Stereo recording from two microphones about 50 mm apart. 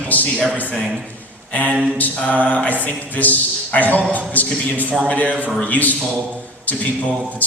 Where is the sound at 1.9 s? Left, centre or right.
Left.